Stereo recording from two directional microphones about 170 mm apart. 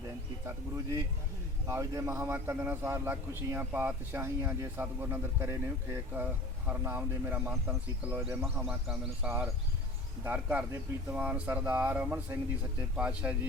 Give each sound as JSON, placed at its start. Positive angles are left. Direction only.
{"t": 0.4, "sound": "a man's voice", "side_deg": -20}